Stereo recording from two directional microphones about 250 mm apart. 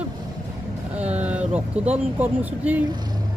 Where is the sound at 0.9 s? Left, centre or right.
Centre.